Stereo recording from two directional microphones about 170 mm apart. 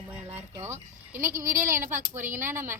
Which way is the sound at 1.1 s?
15° right (ahead or behind).